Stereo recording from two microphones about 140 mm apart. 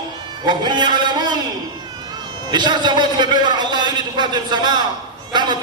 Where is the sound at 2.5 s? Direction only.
30° right (ahead or behind).